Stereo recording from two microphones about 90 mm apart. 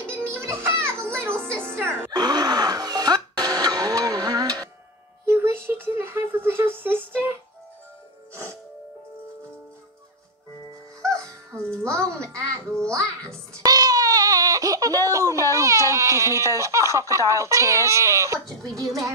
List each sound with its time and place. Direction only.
0.0 s music: 25° right (ahead or behind)
2.1 s music: 50° right (ahead or behind)
5.2 s a sound: 30° right (ahead or behind)
11.5 s music: 10° left (ahead or behind)
11.9 s music: 35° right (ahead or behind)
13.7 s baby cry: 45° right (ahead or behind)
17.3 s speech: 35° right (ahead or behind)